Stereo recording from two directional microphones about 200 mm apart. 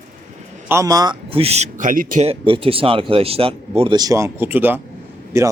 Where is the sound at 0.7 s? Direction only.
15° right (ahead or behind); by 2.2 s 45° right (ahead or behind).